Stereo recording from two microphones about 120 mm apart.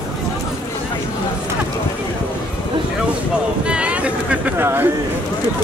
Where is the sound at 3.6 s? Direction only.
10° right (ahead or behind).